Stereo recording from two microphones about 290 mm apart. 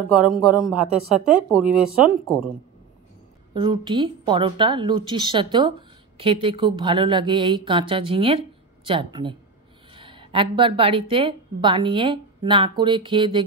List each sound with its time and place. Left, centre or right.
0.5 s speech: centre
3.5 s speech: centre